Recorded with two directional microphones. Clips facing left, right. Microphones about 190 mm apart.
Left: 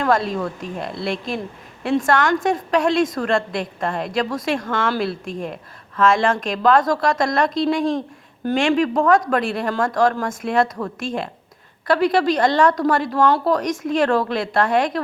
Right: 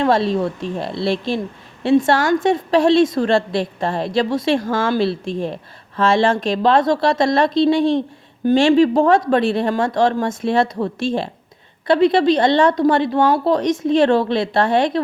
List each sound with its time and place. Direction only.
0.0 s speech: 30° right (ahead or behind)